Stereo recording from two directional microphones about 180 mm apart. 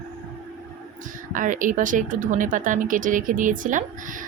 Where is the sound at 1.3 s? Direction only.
45° right (ahead or behind).